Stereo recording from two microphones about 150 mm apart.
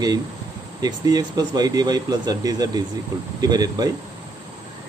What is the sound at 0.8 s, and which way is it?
Speech, 25° right (ahead or behind).